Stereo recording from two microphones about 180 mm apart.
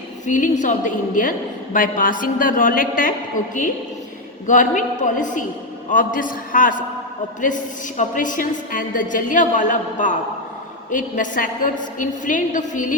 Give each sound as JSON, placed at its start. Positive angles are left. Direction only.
{"t": 0.3, "sound": "a woman's voice", "side_deg": 45}